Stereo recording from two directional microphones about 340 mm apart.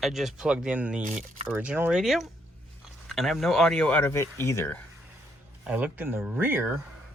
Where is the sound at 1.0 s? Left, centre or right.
Right.